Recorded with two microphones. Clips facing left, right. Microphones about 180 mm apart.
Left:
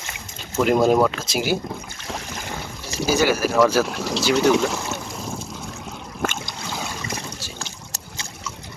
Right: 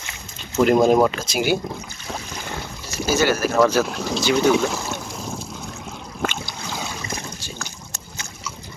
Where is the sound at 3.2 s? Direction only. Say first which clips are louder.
Even; 10° left (ahead or behind).